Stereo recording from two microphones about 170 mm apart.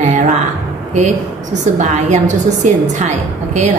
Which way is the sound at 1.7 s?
45° right (ahead or behind).